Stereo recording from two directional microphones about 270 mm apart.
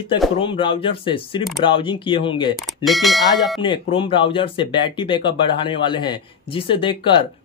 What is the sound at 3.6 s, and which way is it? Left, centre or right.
Speech, centre.